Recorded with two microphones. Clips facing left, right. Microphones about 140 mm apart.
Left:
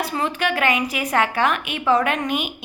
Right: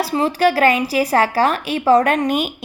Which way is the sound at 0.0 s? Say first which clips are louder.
Right 7 dB; 35° right (ahead or behind).